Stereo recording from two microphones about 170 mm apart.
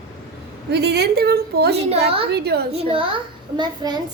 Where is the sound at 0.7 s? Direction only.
75° right (ahead or behind).